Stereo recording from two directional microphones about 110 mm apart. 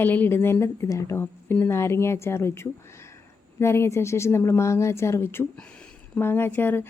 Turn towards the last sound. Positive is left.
turn(degrees=20)  # may be behind; listen again after turning